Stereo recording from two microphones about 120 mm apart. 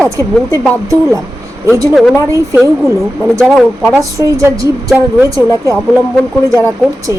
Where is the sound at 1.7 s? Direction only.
25° right (ahead or behind).